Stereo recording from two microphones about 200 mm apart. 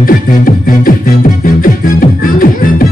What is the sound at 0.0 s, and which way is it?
Music, 45° left (ahead or behind).